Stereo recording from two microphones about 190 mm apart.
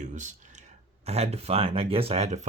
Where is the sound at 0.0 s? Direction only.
40° right (ahead or behind).